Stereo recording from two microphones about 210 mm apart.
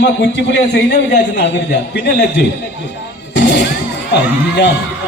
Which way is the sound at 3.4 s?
55° left (ahead or behind).